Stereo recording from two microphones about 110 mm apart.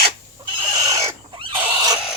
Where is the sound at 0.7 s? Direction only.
40° right (ahead or behind).